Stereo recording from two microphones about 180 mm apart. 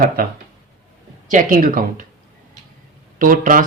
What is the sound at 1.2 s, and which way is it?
Speech, 45° right (ahead or behind).